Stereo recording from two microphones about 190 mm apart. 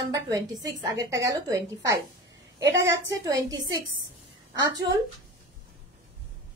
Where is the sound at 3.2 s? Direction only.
20° right (ahead or behind).